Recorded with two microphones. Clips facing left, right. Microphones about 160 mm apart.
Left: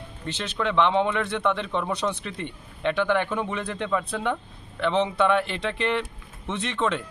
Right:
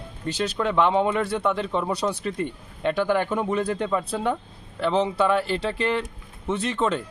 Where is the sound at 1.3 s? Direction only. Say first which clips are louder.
Right 1 dB; 5° right (ahead or behind).